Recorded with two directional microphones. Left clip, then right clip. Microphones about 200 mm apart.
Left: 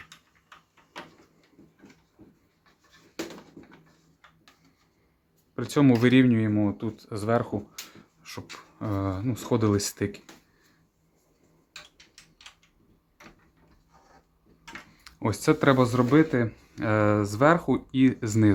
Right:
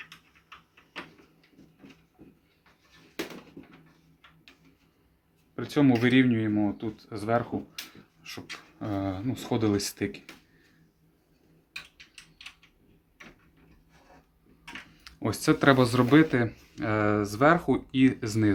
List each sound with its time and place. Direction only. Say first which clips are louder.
5.5 s speech: left 2 dB; 40° left (ahead or behind)
15.0 s a sound: left 2 dB; 30° left (ahead or behind)
15.6 s speech: right 2 dB; 15° left (ahead or behind)
16.7 s speech: left 3 dB; 30° left (ahead or behind)